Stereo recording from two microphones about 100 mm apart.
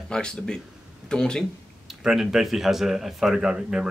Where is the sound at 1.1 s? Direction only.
5° left (ahead or behind).